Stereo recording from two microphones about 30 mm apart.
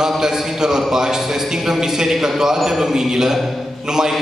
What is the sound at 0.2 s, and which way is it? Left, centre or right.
A man's voice, centre.